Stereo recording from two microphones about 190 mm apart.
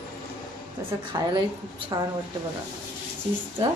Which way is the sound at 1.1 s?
20° right (ahead or behind).